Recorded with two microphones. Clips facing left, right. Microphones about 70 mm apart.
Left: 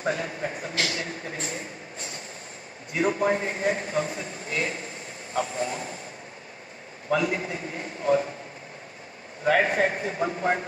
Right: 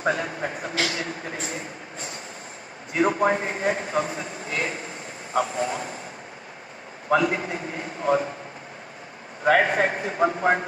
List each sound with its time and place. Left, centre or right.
0.0 s a man's voice: right
7.1 s a man's voice: right
9.4 s a man's voice: right